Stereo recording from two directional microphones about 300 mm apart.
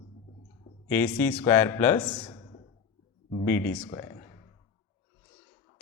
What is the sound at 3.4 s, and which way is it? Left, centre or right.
Speech, centre.